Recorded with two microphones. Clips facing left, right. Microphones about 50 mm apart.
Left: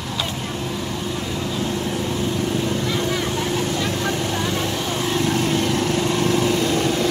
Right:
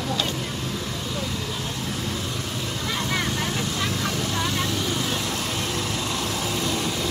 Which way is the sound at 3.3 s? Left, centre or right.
Left.